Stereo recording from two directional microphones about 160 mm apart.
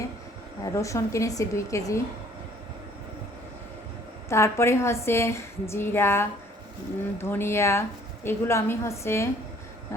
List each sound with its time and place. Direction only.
0.6 s a woman's voice: 20° left (ahead or behind)
4.3 s a woman's voice: 15° left (ahead or behind)